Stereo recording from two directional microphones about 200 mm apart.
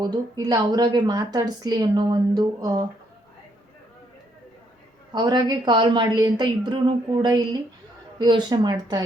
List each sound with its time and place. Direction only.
0.0 s a woman's voice: 20° right (ahead or behind)
5.1 s a woman's voice: 20° right (ahead or behind)